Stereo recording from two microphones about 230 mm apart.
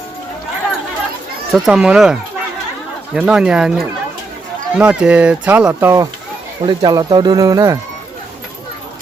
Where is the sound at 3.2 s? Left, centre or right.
Centre.